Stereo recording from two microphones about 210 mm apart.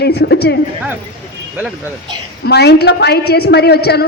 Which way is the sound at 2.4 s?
50° left (ahead or behind).